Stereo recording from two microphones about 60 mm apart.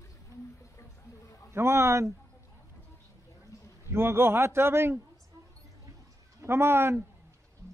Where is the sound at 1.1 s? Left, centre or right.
Left.